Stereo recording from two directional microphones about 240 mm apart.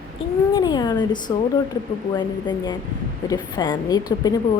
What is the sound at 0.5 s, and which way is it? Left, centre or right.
Speech, centre.